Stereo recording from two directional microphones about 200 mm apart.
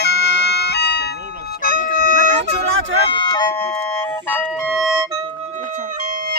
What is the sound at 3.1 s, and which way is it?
Music, 20° left (ahead or behind).